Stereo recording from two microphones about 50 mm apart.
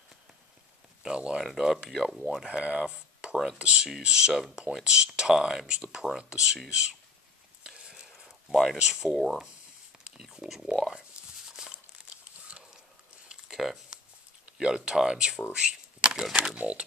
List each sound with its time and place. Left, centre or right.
1.0 s speech: centre
1.4 s speech: centre
2.4 s speech: right
4.3 s speech: centre
4.8 s speech: centre
7.6 s a sound: centre
8.7 s speech: centre
9.1 s speech: centre
10.1 s speech: centre
10.9 s a sound: centre
13.3 s a sound: centre
14.6 s speech: centre
15.5 s a sound: centre
16.5 s speech: right